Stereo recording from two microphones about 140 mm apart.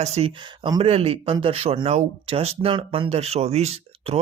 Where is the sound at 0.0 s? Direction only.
45° right (ahead or behind).